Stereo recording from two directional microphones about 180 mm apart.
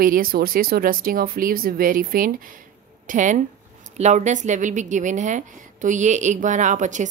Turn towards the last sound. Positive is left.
turn(degrees=-45)  # may be behind; listen again after turning